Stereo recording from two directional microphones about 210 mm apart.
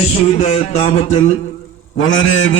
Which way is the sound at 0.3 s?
30° left (ahead or behind).